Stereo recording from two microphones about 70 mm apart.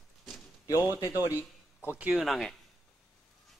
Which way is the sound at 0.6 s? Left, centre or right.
Left.